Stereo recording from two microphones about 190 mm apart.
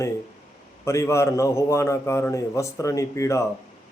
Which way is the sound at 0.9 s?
15° left (ahead or behind).